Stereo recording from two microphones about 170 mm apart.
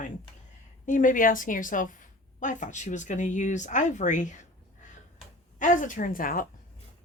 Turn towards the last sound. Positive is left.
turn(degrees=55)  # may be behind; listen again after turning